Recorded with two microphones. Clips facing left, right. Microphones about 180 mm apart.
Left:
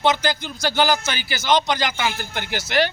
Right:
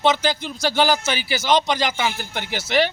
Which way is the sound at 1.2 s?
30° right (ahead or behind).